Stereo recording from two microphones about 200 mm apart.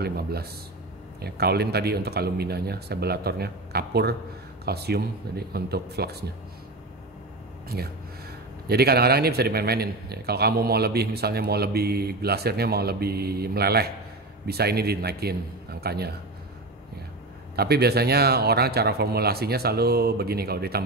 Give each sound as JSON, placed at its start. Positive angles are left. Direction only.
{"t": 0.0, "sound": "speech", "side_deg": -50}
{"t": 7.6, "sound": "speech", "side_deg": -50}
{"t": 17.6, "sound": "speech", "side_deg": -55}